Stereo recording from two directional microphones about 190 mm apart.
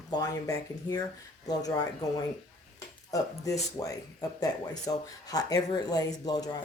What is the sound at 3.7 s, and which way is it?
Speech, 15° left (ahead or behind).